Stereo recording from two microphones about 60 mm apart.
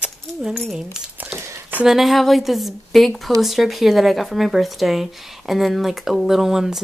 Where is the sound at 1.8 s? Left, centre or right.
Centre.